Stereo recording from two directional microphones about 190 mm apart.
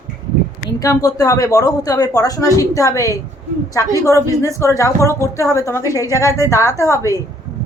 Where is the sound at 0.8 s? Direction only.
20° left (ahead or behind).